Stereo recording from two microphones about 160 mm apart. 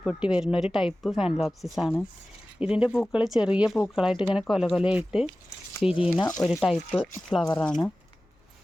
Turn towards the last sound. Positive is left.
turn(degrees=5)  # may be behind; listen again after turning